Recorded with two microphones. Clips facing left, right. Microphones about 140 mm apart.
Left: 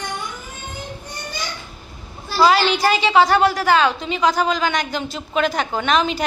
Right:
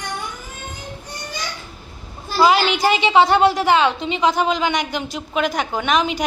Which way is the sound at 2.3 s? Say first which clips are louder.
Even; 15° right (ahead or behind).